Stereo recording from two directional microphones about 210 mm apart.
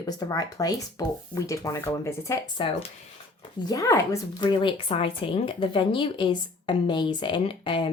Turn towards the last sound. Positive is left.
turn(degrees=25)  # may be behind; listen again after turning